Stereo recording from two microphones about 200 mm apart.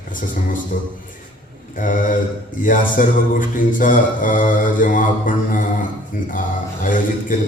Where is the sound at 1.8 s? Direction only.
40° left (ahead or behind).